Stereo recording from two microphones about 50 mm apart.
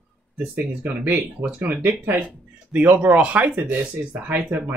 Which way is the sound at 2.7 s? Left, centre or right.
Right.